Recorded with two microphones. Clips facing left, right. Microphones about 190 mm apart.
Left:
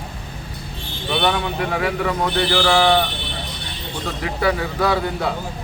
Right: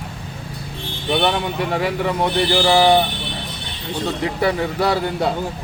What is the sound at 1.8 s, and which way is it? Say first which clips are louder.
A man's voice: right 1 dB; 25° right (ahead or behind).